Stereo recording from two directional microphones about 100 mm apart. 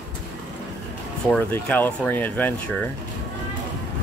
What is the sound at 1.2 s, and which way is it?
Speech, 10° left (ahead or behind).